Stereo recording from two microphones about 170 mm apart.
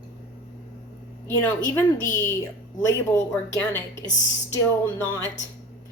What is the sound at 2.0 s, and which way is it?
A woman's voice, 15° left (ahead or behind).